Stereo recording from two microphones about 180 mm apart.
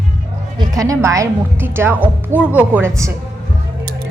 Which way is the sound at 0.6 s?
20° right (ahead or behind).